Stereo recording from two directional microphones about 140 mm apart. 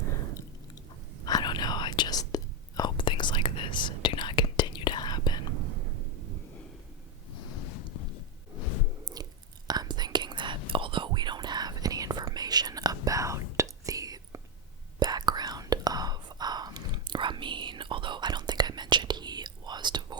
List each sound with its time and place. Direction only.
1.2 s whispering: 30° left (ahead or behind)
9.2 s chewing: 25° right (ahead or behind)
9.6 s whispering: 30° right (ahead or behind)